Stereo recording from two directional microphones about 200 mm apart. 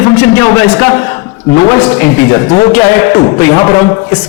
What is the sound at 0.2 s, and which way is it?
A man's voice, 10° left (ahead or behind).